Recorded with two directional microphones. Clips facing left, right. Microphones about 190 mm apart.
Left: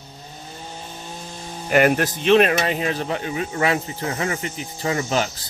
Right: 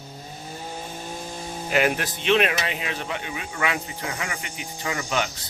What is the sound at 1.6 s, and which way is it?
Speech, 50° left (ahead or behind).